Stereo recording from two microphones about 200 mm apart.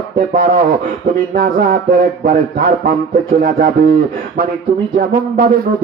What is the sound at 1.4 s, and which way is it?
A man's voice, 50° right (ahead or behind).